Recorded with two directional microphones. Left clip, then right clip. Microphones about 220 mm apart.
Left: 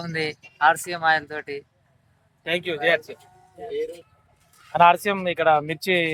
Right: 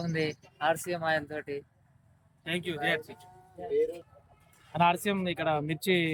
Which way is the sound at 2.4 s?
25° left (ahead or behind).